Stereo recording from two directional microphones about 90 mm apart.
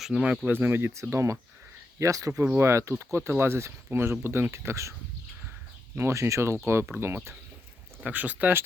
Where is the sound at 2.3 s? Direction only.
20° right (ahead or behind).